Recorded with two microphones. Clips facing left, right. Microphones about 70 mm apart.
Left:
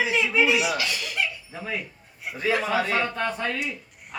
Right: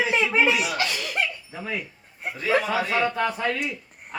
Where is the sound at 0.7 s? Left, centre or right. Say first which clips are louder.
Right 2 dB; right.